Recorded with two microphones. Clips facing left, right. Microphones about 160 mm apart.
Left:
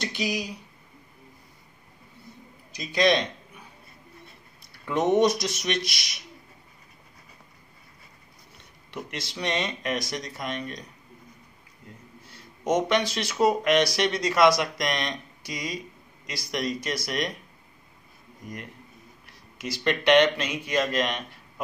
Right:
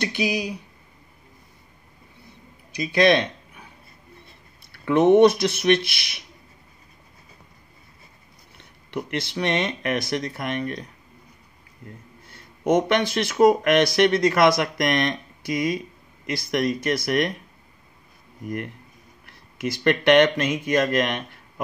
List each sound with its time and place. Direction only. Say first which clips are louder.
0.0 s speech: right 5 dB; 60° right (ahead or behind)
2.7 s a sound: right 4 dB; 60° right (ahead or behind)
4.8 s speech: right 7 dB; 60° right (ahead or behind)
8.9 s speech: right 8 dB; 60° right (ahead or behind)
12.3 s speech: right 5 dB; 55° right (ahead or behind)
19.2 s speech: right 7 dB; 55° right (ahead or behind)